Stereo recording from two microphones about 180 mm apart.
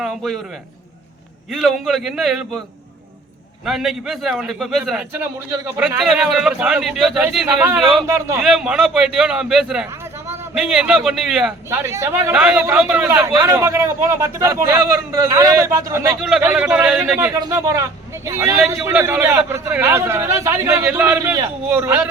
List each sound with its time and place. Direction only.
0.0 s a man's voice: centre (ahead or behind)
1.5 s a man's voice: centre (ahead or behind)
3.7 s a man's voice: centre (ahead or behind)
7.2 s a man's voice: 15° right (ahead or behind)
8.4 s a man's voice: 5° right (ahead or behind)
11.7 s a man's voice: 15° right (ahead or behind)
13.1 s a man's voice: 15° right (ahead or behind)